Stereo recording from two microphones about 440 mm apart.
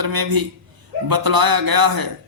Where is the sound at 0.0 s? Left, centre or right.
Right.